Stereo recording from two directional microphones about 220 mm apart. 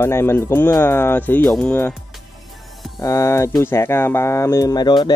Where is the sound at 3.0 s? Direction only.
15° left (ahead or behind).